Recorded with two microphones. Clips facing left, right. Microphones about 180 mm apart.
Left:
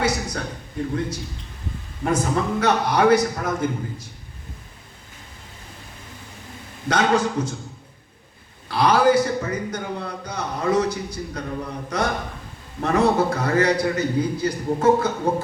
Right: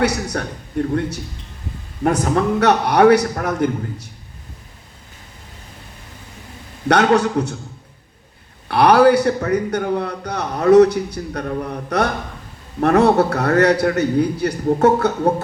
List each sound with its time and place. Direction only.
0.0 s a man's voice: 65° right (ahead or behind)
2.0 s a man's voice: 65° right (ahead or behind)
6.8 s a man's voice: 65° right (ahead or behind)
8.6 s a man's voice: 65° right (ahead or behind)